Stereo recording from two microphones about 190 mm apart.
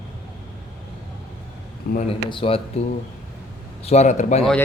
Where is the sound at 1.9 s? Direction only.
55° left (ahead or behind).